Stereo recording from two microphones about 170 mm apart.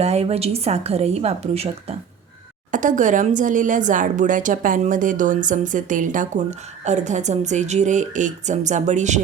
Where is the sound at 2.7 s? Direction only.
50° right (ahead or behind).